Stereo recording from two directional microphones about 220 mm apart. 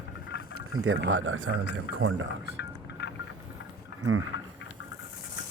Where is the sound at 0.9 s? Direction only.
60° right (ahead or behind).